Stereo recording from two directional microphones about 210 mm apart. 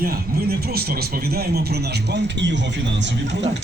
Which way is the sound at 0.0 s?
45° right (ahead or behind).